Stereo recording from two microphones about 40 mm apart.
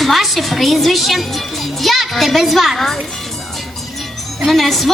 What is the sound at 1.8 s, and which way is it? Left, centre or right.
Speech, centre.